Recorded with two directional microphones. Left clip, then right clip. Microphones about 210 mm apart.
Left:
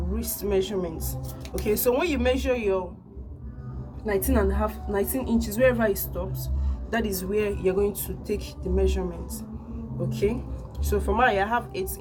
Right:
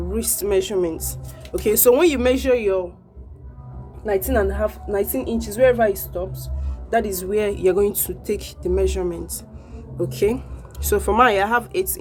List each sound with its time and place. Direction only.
0.1 s speech: 55° right (ahead or behind)
4.2 s a woman's voice: 30° right (ahead or behind); by 11.9 s 55° right (ahead or behind)